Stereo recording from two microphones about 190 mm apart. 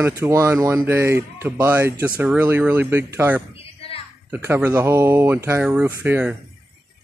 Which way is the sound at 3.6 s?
30° left (ahead or behind).